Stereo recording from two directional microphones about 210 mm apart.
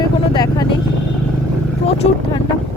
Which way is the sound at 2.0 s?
30° left (ahead or behind).